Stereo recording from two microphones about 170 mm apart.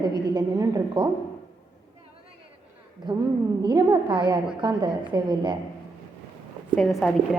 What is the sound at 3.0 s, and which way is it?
A woman's voice, 25° right (ahead or behind).